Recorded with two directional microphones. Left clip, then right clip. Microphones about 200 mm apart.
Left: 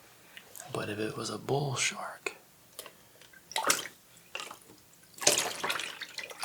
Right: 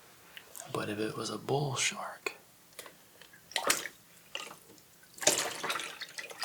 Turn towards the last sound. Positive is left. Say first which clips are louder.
# left 1 dB
turn(degrees=-5)  # may be behind; listen again after turning